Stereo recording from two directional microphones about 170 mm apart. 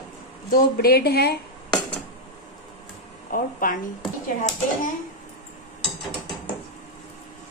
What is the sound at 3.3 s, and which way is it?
Speech, 55° left (ahead or behind).